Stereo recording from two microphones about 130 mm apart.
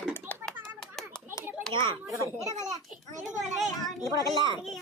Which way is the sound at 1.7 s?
40° right (ahead or behind).